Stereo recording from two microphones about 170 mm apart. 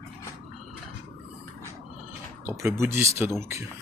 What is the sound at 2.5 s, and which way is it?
Speech, 15° right (ahead or behind).